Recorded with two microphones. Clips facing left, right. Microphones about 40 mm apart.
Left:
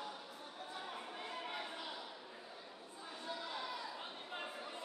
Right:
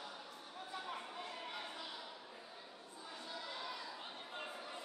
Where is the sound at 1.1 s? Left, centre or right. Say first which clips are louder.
Left 2 dB; centre.